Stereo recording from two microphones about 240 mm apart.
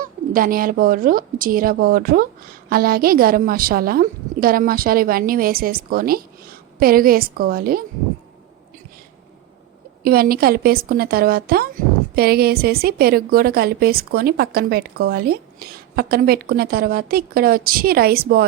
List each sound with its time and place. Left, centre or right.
0.0 s a woman's voice: right
10.0 s a woman's voice: right